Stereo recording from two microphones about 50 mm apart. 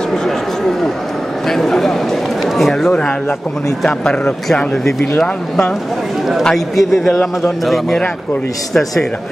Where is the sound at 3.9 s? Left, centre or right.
Centre.